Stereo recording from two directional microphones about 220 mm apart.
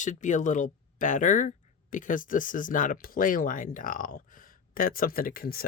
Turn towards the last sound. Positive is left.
turn(degrees=40)  # may be behind; listen again after turning